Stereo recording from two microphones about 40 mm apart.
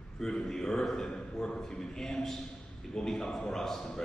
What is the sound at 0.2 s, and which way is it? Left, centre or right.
Speech, centre.